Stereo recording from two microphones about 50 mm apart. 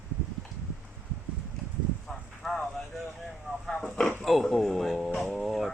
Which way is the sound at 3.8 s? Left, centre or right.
Centre.